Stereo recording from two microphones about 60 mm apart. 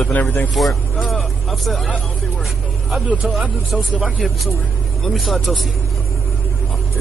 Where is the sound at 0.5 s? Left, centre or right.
Centre.